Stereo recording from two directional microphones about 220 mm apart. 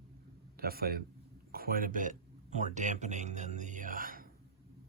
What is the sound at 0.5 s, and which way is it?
A man's voice, 45° right (ahead or behind).